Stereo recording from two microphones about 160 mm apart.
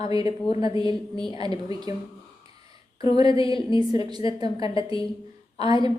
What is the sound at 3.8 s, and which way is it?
Speech, 25° right (ahead or behind).